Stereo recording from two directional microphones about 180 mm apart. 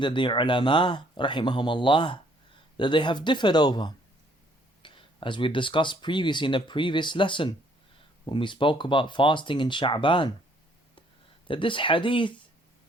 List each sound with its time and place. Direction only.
0.0 s speech: 25° left (ahead or behind)
11.4 s speech: 30° left (ahead or behind)